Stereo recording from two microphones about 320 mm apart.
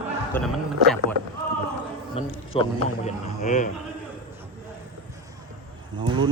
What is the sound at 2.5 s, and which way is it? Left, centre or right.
Speech, centre.